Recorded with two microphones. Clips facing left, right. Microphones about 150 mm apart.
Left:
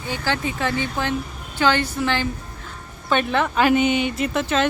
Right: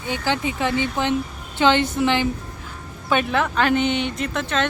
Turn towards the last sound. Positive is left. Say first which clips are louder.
# left 3 dB
turn(degrees=5)  # may be behind; listen again after turning